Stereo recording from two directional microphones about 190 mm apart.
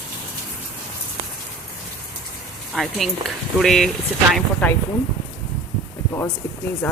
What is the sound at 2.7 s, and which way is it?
Speech, centre (ahead or behind).